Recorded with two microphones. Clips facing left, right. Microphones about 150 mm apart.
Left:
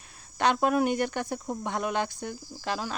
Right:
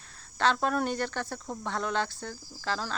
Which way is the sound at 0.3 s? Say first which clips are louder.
Left 3 dB; 15° left (ahead or behind).